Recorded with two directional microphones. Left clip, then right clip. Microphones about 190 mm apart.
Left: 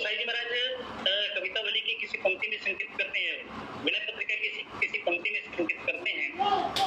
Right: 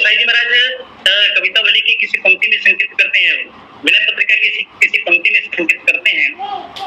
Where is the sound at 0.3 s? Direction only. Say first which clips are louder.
Right 19 dB; 45° right (ahead or behind).